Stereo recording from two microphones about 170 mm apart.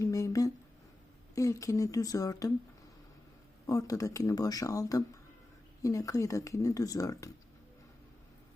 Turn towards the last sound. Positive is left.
turn(degrees=20)  # may be behind; listen again after turning